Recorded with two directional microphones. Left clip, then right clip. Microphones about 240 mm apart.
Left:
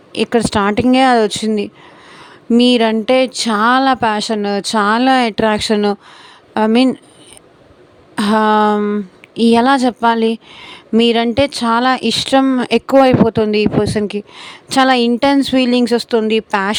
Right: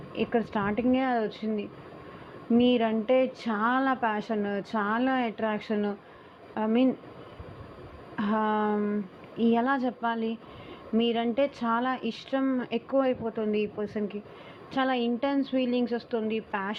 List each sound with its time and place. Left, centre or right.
0.2 s a woman's voice: left
8.1 s speech: left